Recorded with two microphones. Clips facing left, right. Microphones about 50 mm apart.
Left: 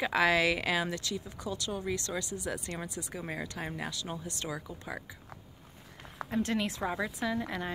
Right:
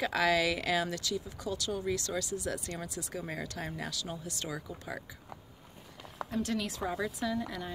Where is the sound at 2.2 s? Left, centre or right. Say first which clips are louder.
Right 1 dB; left.